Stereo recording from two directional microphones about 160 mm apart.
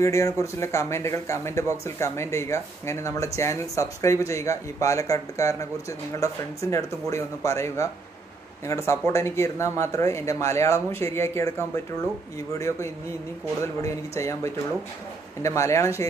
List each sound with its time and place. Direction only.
0.0 s speech: 20° left (ahead or behind)